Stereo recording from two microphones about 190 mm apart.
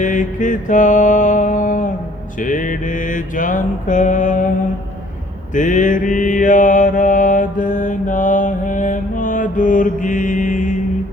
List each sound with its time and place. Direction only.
0.0 s mantra: 40° left (ahead or behind)
5.5 s mantra: 40° left (ahead or behind)